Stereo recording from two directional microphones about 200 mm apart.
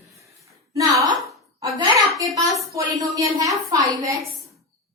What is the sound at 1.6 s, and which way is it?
A child's voice, 20° right (ahead or behind).